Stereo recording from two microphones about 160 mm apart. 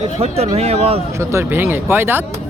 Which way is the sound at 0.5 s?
40° right (ahead or behind).